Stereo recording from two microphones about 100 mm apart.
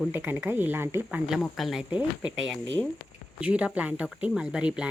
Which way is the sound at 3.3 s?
15° right (ahead or behind).